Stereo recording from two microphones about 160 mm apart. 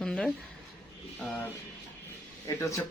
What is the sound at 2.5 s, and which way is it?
Speech, 20° left (ahead or behind).